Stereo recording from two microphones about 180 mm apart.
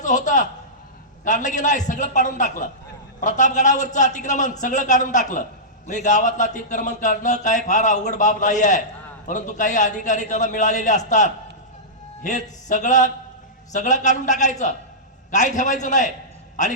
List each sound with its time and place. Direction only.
0.0 s a man's voice: 45° left (ahead or behind)